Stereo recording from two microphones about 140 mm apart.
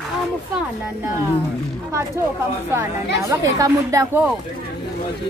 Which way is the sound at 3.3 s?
25° right (ahead or behind).